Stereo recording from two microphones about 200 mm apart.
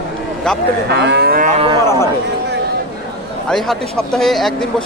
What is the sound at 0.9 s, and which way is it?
Moo, 55° right (ahead or behind).